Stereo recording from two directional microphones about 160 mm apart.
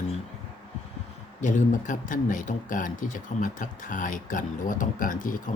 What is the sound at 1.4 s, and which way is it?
Speech, 50° left (ahead or behind).